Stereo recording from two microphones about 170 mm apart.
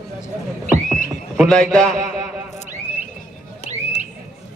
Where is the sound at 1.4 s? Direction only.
5° left (ahead or behind).